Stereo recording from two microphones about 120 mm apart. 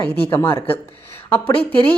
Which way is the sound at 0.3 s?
20° left (ahead or behind).